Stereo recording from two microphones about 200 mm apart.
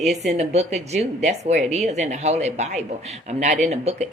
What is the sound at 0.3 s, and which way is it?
Speech, 35° right (ahead or behind).